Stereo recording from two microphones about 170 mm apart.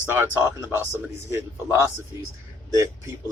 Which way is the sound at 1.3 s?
15° right (ahead or behind).